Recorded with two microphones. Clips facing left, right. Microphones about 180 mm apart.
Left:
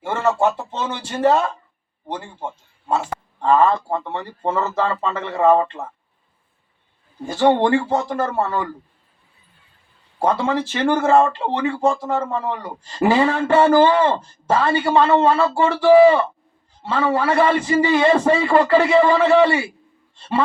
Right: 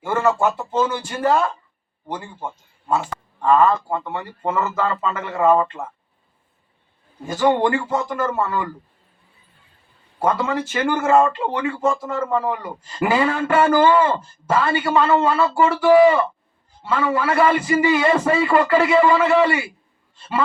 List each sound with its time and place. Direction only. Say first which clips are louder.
0.0 s speech: even; 25° left (ahead or behind)
7.3 s speech: left 2 dB; 30° left (ahead or behind)
10.2 s speech: left 1 dB; 30° left (ahead or behind)